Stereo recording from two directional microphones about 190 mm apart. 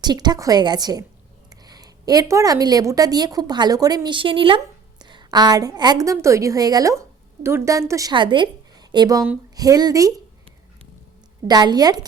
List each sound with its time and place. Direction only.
0.0 s a woman's voice: 20° right (ahead or behind)
11.4 s a woman's voice: 20° right (ahead or behind)